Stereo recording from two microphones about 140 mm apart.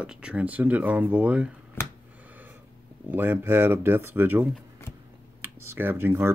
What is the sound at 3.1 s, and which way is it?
Speech, 15° right (ahead or behind).